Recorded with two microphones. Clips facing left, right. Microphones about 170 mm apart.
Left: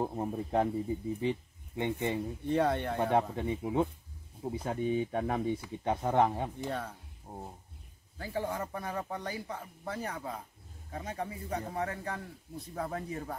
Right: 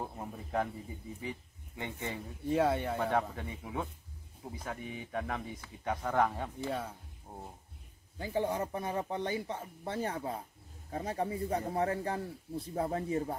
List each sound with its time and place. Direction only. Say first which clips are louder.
0.0 s speech: left 8 dB; 30° left (ahead or behind)
1.8 s speech: left 7 dB; 20° left (ahead or behind)
2.4 s speech: even; 5° right (ahead or behind)
3.0 s speech: left 3 dB; 20° left (ahead or behind)
8.2 s speech: right 2 dB; 20° right (ahead or behind)